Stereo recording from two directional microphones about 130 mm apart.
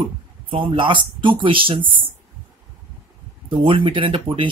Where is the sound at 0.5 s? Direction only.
40° right (ahead or behind).